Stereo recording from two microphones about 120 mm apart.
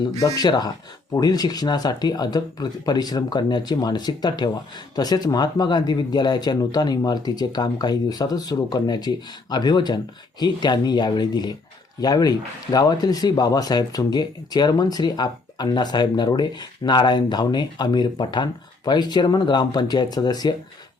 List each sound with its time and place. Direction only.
0.2 s speech: 30° left (ahead or behind)